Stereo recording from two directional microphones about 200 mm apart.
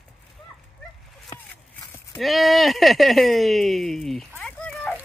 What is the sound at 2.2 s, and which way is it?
Speech, centre (ahead or behind).